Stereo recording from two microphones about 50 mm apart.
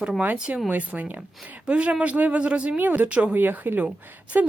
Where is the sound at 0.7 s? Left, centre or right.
Right.